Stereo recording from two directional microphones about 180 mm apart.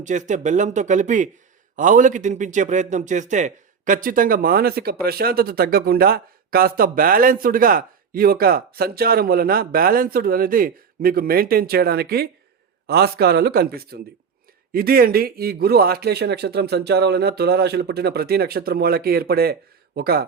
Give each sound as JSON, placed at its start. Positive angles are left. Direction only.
{"t": 0.0, "sound": "a man's voice", "side_deg": -40}